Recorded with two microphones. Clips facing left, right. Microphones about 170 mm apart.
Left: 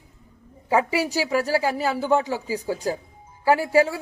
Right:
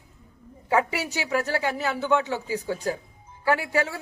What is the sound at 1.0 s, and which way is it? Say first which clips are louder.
A woman's voice: left 4 dB; 35° left (ahead or behind).